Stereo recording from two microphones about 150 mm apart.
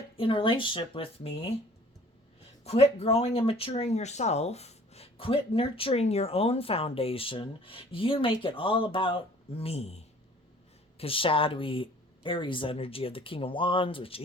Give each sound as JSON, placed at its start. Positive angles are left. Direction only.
{"t": 0.2, "sound": "speech", "side_deg": 35}
{"t": 2.6, "sound": "speech", "side_deg": 45}